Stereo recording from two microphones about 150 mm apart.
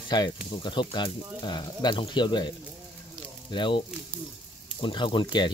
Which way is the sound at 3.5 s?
30° left (ahead or behind).